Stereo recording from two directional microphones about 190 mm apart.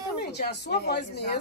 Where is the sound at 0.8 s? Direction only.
60° left (ahead or behind).